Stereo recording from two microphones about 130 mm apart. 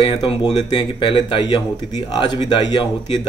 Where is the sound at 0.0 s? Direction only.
35° left (ahead or behind).